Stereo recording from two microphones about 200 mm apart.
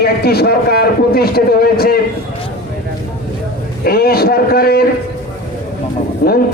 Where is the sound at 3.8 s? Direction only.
50° left (ahead or behind).